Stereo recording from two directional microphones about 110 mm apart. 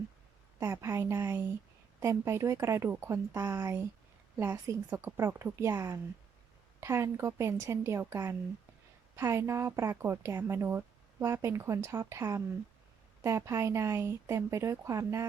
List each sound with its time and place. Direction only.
0.6 s speech: 25° right (ahead or behind)